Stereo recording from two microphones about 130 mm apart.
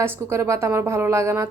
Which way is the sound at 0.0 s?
20° right (ahead or behind).